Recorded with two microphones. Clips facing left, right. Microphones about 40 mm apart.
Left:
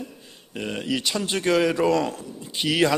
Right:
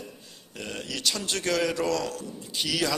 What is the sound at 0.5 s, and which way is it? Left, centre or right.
A man's voice, left.